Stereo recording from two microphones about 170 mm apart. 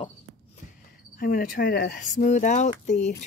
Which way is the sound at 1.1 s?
60° left (ahead or behind).